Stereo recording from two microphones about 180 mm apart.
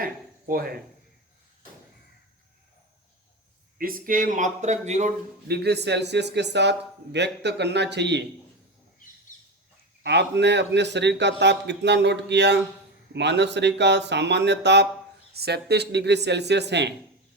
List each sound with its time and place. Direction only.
0.0 s a sound: 55° right (ahead or behind)
3.8 s speech: 50° right (ahead or behind)
5.5 s speech: 65° right (ahead or behind)
10.0 s speech: 70° right (ahead or behind)